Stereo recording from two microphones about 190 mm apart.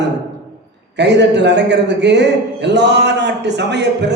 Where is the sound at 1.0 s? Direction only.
65° right (ahead or behind).